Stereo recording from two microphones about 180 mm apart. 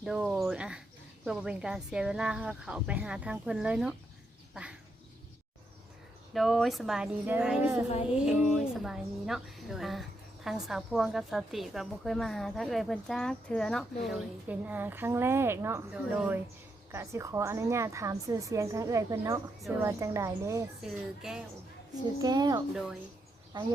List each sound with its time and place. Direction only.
0.0 s a sound: centre (ahead or behind)
1.2 s a woman's voice: 5° right (ahead or behind)
4.5 s duck: 5° right (ahead or behind)
6.3 s a woman's voice: centre (ahead or behind)
14.4 s a woman's voice: 10° right (ahead or behind)
20.8 s a woman's voice: 5° right (ahead or behind)
22.2 s speech: 20° right (ahead or behind)
22.7 s a woman's voice: 5° right (ahead or behind)
23.5 s speech: 25° right (ahead or behind)